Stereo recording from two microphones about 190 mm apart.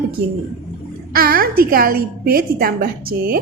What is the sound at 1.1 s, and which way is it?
A woman's voice, 50° right (ahead or behind).